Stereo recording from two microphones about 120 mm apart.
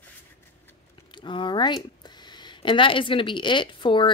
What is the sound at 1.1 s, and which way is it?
Speech, 40° left (ahead or behind).